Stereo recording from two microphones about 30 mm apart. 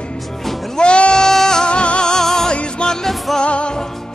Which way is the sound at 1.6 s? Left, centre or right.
Left.